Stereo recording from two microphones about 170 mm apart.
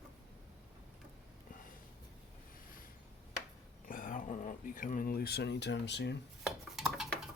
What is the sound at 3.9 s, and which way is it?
Speech, 55° left (ahead or behind).